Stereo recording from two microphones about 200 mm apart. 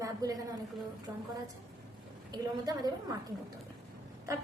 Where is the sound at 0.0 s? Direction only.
20° right (ahead or behind).